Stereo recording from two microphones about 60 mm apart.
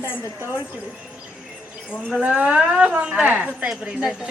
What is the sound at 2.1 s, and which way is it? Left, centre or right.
A woman's voice, centre.